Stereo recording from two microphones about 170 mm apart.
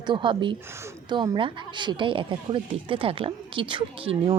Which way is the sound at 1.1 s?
25° right (ahead or behind).